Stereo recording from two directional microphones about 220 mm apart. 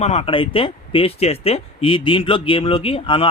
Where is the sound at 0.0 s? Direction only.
30° left (ahead or behind).